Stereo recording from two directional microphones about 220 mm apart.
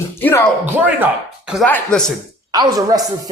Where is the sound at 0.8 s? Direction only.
5° right (ahead or behind).